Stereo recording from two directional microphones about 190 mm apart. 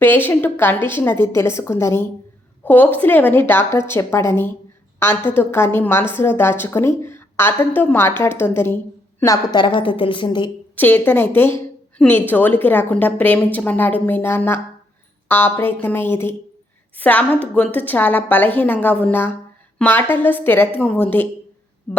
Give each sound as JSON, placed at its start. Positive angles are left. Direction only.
{"t": 0.0, "sound": "a woman's voice", "side_deg": 10}
{"t": 10.8, "sound": "a woman's voice", "side_deg": 10}